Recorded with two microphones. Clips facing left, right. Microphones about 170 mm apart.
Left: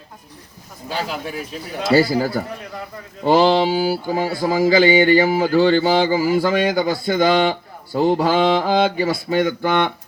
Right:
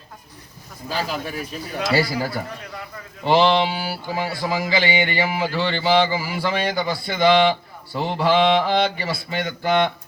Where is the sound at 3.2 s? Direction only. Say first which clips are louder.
Left 3 dB; 40° left (ahead or behind).